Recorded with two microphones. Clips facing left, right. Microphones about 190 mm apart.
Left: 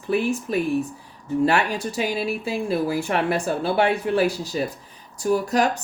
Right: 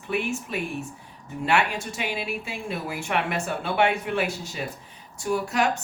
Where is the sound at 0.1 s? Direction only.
35° left (ahead or behind).